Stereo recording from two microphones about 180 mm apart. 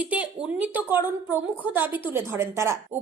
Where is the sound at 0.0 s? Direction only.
10° right (ahead or behind).